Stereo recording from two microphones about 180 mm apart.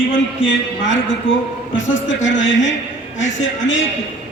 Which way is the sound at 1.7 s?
90° left.